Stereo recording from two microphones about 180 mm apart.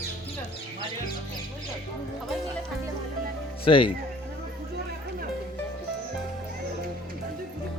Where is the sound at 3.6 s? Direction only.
30° left (ahead or behind).